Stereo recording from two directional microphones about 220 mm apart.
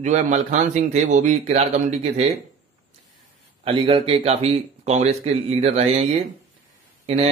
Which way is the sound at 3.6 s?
25° right (ahead or behind).